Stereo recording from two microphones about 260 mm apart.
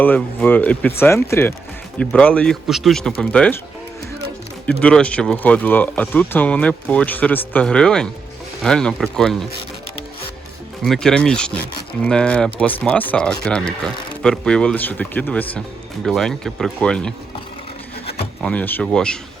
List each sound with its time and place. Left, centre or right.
0.0 s speech: centre
4.6 s speech: centre
10.8 s speech: centre
18.4 s speech: centre